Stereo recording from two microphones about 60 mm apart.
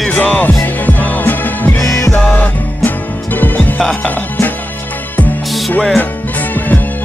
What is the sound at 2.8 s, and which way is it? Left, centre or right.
Music, left.